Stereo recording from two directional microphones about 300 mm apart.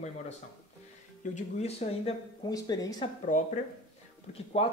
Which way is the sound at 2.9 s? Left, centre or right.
Left.